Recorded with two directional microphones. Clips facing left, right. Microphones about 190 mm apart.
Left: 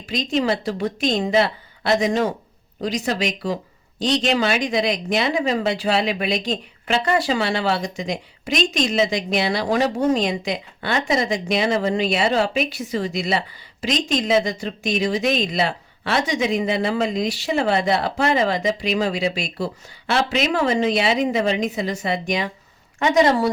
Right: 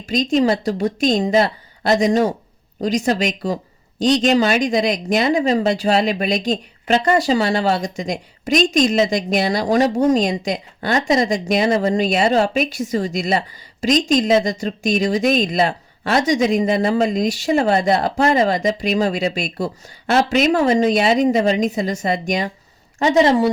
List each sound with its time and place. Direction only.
0.0 s speech: 45° right (ahead or behind)
23.0 s a woman's voice: 30° right (ahead or behind)